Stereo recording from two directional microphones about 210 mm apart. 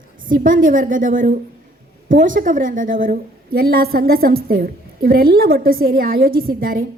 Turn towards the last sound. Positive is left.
turn(degrees=-45)  # may be behind; listen again after turning